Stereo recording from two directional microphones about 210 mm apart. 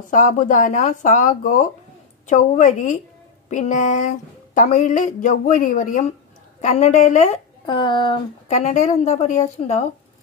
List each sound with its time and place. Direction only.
0.1 s speech: 40° left (ahead or behind)
7.6 s speech: 20° left (ahead or behind)